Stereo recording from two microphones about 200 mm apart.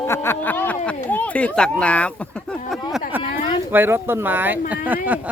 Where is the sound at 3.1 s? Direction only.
10° right (ahead or behind).